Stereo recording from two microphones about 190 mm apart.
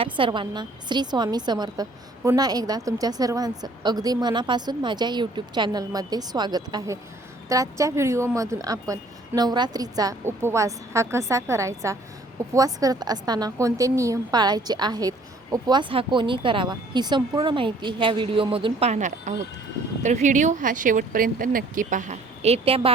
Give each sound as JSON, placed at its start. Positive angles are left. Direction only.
{"t": 0.0, "sound": "a woman's voice", "side_deg": -25}